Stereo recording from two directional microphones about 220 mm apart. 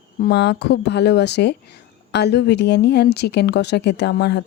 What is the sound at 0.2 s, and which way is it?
Speech, 50° left (ahead or behind).